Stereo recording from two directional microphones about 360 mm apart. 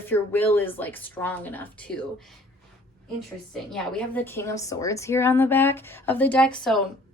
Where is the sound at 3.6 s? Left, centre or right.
Centre.